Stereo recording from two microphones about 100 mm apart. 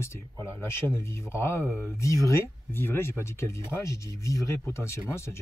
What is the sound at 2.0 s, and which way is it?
Speech, 30° left (ahead or behind).